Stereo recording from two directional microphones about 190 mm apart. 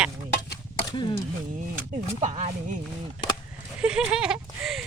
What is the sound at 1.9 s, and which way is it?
Speech, 40° right (ahead or behind).